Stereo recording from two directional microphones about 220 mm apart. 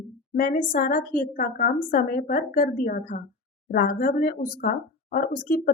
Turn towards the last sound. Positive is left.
turn(degrees=40)  # may be behind; listen again after turning